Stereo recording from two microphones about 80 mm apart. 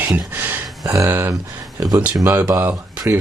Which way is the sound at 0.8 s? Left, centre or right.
Right.